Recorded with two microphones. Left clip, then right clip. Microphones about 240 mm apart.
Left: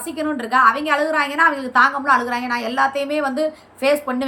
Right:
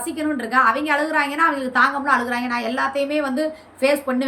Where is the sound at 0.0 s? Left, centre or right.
Centre.